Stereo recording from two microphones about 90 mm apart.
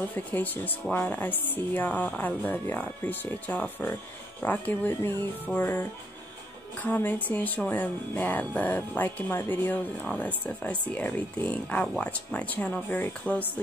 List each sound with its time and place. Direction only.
0.1 s speech: 20° left (ahead or behind)